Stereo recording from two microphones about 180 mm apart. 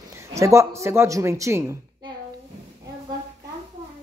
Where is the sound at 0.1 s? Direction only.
15° right (ahead or behind).